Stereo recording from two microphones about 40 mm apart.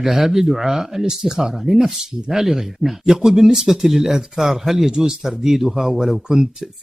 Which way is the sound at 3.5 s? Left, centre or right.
Centre.